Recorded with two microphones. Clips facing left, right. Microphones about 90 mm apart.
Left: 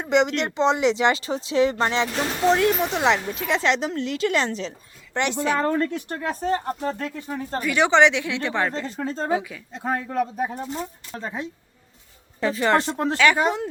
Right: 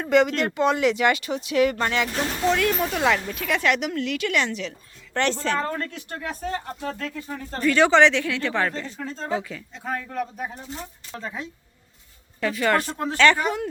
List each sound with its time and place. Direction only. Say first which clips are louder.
0.0 s speech: right 1 dB; 20° left (ahead or behind)
5.1 s speech: left 1 dB; 15° left (ahead or behind)
6.1 s speech: left 5 dB; 30° left (ahead or behind)
7.0 s speech: left 2 dB; 20° left (ahead or behind)
9.0 s speech: left 5 dB; 40° left (ahead or behind)
9.3 s speech: left 1 dB; 10° left (ahead or behind)
9.7 s speech: left 5 dB; 40° left (ahead or behind)
11.1 s speech: right 1 dB; 25° left (ahead or behind)
13.1 s speech: right 2 dB; 10° left (ahead or behind)
13.4 s speech: left 3 dB; 20° left (ahead or behind)